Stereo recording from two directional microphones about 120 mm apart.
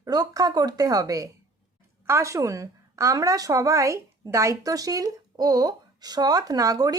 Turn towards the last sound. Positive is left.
turn(degrees=-30)  # may be behind; listen again after turning